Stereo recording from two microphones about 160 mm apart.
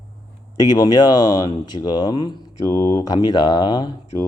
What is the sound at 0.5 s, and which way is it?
Speech, 25° left (ahead or behind).